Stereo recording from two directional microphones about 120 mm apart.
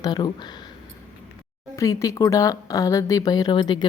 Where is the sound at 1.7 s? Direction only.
25° left (ahead or behind).